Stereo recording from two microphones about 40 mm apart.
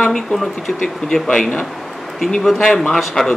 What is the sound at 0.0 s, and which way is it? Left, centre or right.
Speech, centre.